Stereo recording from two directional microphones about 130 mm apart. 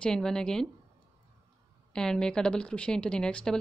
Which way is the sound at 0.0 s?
5° left (ahead or behind).